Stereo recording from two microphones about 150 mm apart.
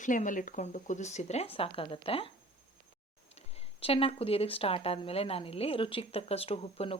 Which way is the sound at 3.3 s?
45° left (ahead or behind).